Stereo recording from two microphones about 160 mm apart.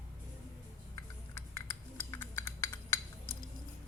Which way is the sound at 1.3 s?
15° left (ahead or behind).